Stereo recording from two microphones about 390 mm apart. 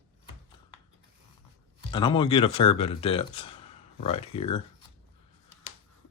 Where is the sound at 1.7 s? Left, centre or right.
Centre.